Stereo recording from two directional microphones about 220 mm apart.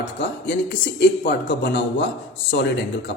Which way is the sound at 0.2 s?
50° left (ahead or behind).